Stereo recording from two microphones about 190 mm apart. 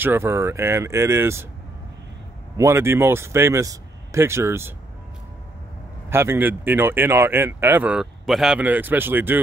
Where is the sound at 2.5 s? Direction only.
15° right (ahead or behind).